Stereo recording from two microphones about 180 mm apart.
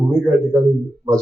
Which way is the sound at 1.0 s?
15° right (ahead or behind).